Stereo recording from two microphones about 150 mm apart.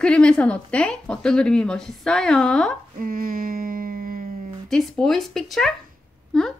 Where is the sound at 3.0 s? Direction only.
70° right (ahead or behind).